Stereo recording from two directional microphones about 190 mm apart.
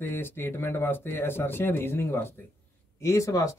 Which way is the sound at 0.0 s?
10° left (ahead or behind).